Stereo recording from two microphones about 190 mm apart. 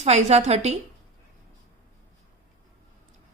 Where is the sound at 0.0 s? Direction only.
35° right (ahead or behind).